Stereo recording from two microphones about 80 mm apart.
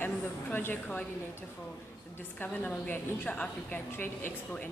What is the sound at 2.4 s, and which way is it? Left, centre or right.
A woman's voice, centre.